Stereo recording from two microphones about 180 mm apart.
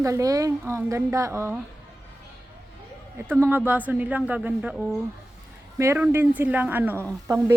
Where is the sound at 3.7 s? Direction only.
10° right (ahead or behind).